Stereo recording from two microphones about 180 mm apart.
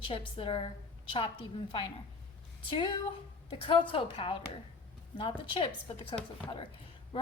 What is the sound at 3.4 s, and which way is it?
A woman's voice, 30° left (ahead or behind).